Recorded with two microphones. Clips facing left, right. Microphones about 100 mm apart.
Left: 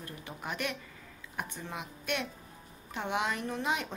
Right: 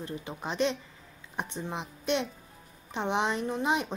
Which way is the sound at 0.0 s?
20° right (ahead or behind).